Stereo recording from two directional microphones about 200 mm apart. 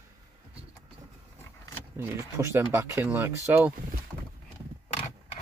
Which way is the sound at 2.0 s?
15° right (ahead or behind).